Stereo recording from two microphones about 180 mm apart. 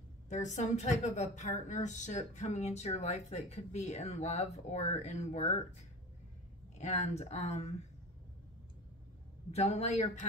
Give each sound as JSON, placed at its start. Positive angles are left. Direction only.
{"t": 0.3, "sound": "a woman's voice", "side_deg": 40}
{"t": 9.5, "sound": "a woman's voice", "side_deg": 35}